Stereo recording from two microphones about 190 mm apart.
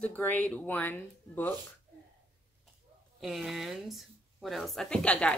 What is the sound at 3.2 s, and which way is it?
Speech, centre (ahead or behind).